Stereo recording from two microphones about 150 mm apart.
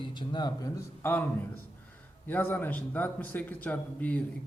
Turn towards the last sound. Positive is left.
turn(degrees=10)  # may be behind; listen again after turning